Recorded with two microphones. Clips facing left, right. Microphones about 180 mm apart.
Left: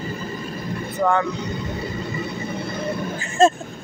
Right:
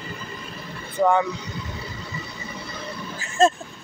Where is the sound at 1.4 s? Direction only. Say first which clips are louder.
Left 7 dB; 55° left (ahead or behind).